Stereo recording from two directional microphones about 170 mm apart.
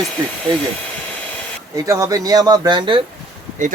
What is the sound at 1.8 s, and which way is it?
Speech, 20° right (ahead or behind).